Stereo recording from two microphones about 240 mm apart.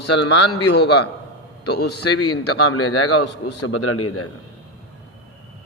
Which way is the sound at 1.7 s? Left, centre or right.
Left.